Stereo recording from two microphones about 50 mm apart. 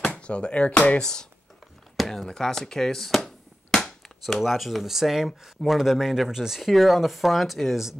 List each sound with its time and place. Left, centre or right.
0.1 s speech: left
2.0 s speech: centre
3.7 s a sound: centre
4.4 s speech: centre